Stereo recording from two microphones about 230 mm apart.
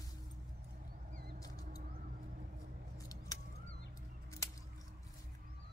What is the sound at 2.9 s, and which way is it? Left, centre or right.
Scissors, centre.